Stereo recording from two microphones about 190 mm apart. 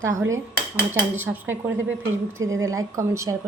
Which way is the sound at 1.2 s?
10° right (ahead or behind).